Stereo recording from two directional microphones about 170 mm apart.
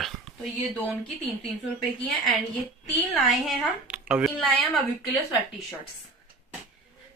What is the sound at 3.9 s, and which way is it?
Speech, 5° right (ahead or behind).